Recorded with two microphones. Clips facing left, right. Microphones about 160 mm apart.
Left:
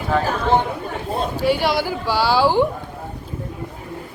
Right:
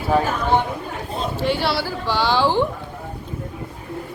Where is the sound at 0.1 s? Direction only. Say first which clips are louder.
Right 2 dB; 15° right (ahead or behind).